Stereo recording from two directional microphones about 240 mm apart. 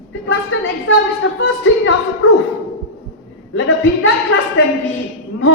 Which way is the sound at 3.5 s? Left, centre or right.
Left.